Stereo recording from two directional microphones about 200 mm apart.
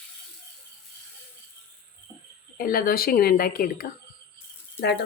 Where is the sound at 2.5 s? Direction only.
45° left (ahead or behind).